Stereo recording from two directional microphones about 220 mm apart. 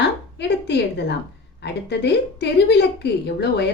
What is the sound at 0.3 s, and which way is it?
A woman's voice, 50° left (ahead or behind).